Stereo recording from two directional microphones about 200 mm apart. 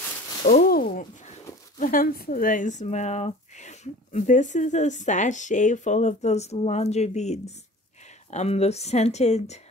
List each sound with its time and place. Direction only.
0.5 s speech: 45° left (ahead or behind)